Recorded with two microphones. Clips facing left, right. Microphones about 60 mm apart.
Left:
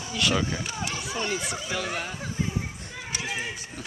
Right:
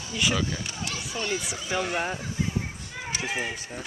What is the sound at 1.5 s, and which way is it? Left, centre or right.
Speech, centre.